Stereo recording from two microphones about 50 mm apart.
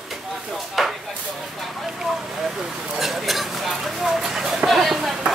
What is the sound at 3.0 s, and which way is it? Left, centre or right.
Speech, centre.